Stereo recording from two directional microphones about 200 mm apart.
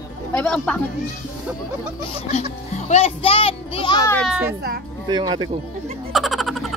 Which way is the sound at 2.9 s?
30° left (ahead or behind).